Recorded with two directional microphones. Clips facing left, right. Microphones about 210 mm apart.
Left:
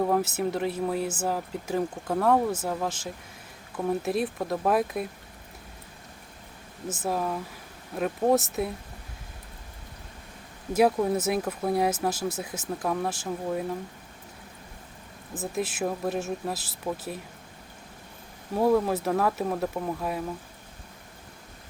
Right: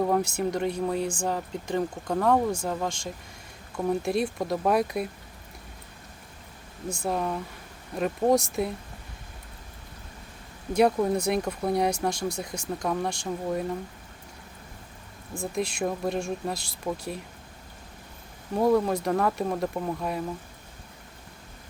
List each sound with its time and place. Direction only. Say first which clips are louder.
0.0 s speech: even; centre (ahead or behind)
6.8 s speech: even; 5° left (ahead or behind)
10.8 s speech: even; 5° left (ahead or behind)
15.3 s speech: right 1 dB; 5° left (ahead or behind)
18.5 s speech: even; centre (ahead or behind)